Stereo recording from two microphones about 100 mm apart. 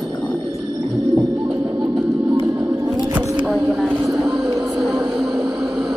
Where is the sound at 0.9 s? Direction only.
45° right (ahead or behind).